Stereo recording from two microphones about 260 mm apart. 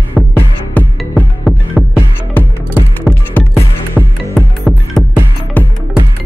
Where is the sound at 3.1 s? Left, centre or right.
Centre.